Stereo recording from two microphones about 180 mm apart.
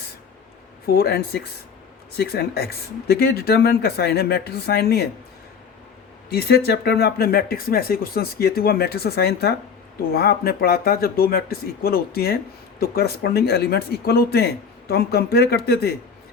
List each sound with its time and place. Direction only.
0.9 s speech: 60° left (ahead or behind)
6.3 s speech: 60° left (ahead or behind)